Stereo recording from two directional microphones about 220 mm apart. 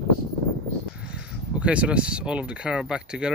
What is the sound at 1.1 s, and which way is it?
Speech, 5° right (ahead or behind).